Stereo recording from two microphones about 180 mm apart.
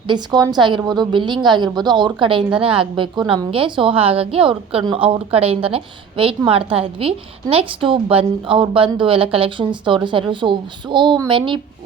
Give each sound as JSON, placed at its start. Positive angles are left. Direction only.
{"t": 0.1, "sound": "a woman's voice", "side_deg": -20}